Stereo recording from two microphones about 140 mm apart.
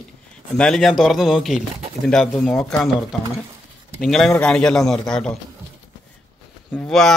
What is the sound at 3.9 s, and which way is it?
Speech, centre (ahead or behind).